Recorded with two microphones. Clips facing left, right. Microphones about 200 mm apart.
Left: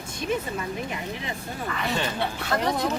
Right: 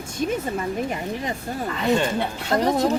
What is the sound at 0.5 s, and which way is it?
Speech, 45° right (ahead or behind).